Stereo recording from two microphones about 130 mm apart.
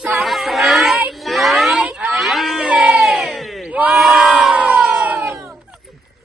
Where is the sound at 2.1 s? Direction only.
Centre (ahead or behind).